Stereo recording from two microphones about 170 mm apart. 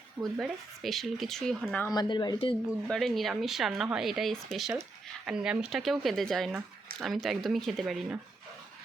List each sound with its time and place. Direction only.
0.2 s speech: centre (ahead or behind)
1.9 s speech: 25° left (ahead or behind)
2.6 s speech: centre (ahead or behind)